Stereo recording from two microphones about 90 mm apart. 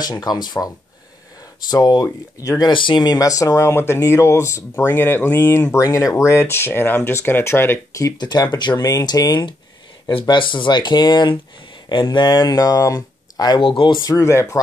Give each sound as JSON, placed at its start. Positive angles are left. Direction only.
{"t": 0.0, "sound": "speech", "side_deg": 45}
{"t": 2.6, "sound": "speech", "side_deg": 65}
{"t": 5.7, "sound": "speech", "side_deg": 35}
{"t": 8.2, "sound": "speech", "side_deg": 50}
{"t": 10.0, "sound": "speech", "side_deg": 55}
{"t": 13.6, "sound": "speech", "side_deg": 70}
{"t": 14.0, "sound": "speech", "side_deg": 35}